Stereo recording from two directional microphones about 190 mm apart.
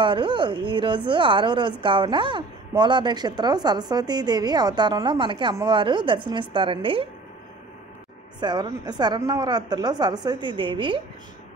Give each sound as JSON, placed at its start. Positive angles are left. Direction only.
{"t": 0.0, "sound": "speech", "side_deg": -25}
{"t": 8.4, "sound": "speech", "side_deg": -20}